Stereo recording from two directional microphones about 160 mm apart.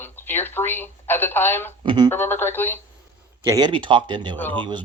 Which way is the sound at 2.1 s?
15° left (ahead or behind).